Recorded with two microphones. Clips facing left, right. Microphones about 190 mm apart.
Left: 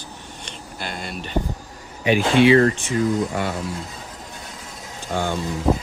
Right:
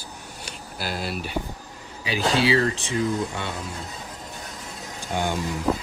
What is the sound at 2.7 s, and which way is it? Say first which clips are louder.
Speech: left 4 dB; 30° right (ahead or behind).